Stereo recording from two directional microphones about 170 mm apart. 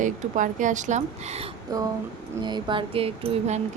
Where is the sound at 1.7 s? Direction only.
20° right (ahead or behind).